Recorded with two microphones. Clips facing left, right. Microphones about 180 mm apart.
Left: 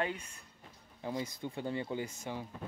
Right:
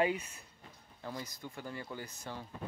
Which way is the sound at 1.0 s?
15° left (ahead or behind).